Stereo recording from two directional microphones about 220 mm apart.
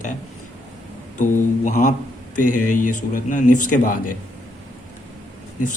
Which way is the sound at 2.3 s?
90° left.